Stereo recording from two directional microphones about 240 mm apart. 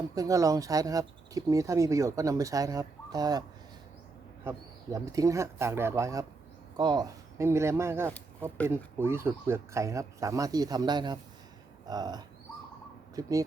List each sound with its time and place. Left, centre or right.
0.1 s speech: centre
4.4 s speech: centre